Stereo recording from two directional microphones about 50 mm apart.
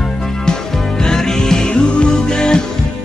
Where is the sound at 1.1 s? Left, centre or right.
Centre.